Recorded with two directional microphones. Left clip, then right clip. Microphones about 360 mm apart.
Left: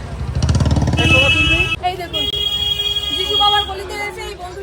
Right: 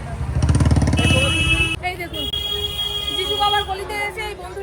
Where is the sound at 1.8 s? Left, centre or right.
Centre.